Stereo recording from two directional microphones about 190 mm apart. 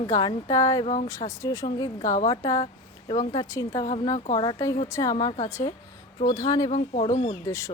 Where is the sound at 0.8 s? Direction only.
40° left (ahead or behind).